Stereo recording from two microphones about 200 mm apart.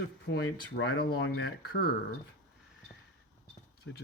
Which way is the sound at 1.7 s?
50° left (ahead or behind).